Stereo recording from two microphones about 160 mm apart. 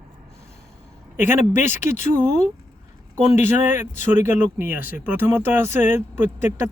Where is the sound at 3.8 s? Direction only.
50° left (ahead or behind).